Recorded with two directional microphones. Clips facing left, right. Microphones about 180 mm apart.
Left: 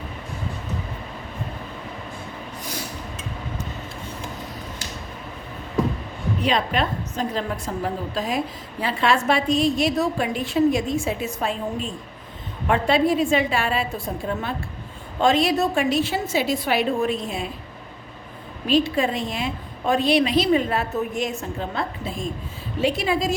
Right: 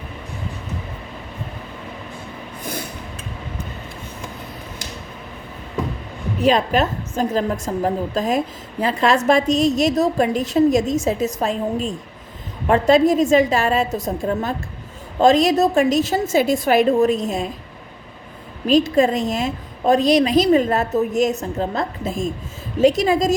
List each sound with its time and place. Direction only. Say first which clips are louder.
6.4 s a woman's voice: right 6 dB; 45° right (ahead or behind)
18.7 s a woman's voice: right 5 dB; 45° right (ahead or behind)